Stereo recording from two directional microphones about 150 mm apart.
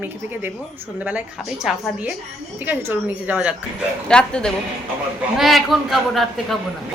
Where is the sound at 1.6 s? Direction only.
5° right (ahead or behind).